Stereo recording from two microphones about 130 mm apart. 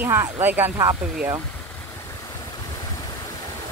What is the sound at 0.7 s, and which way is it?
Speech, 30° right (ahead or behind).